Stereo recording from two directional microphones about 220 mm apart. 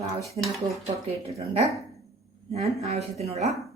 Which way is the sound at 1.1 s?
25° right (ahead or behind).